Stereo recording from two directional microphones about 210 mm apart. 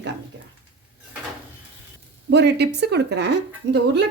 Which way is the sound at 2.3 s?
55° right (ahead or behind).